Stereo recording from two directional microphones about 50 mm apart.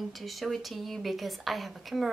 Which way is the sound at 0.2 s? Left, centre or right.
Centre.